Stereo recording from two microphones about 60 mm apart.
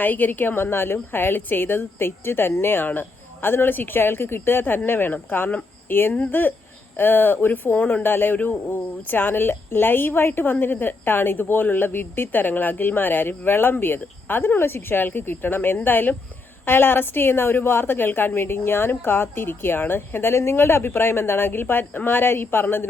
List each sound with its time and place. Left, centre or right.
0.0 s speech: left